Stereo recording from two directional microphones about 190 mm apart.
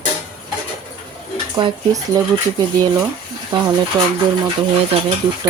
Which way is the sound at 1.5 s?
20° right (ahead or behind).